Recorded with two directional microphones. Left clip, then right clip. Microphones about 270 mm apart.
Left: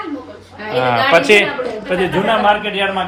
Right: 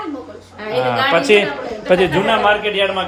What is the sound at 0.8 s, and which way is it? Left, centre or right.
Speech, centre.